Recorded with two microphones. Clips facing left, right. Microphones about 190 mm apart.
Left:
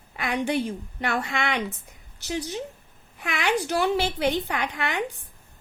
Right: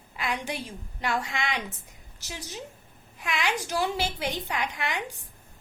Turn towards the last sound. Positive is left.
turn(degrees=60)  # may be behind; listen again after turning